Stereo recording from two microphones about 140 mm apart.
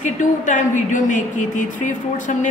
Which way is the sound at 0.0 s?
60° left (ahead or behind).